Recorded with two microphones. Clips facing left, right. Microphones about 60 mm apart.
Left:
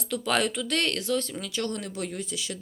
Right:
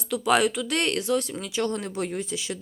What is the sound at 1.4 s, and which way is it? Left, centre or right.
Speech, right.